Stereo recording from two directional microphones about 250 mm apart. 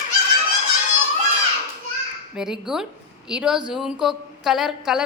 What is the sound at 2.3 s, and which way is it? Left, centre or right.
A woman's voice, centre.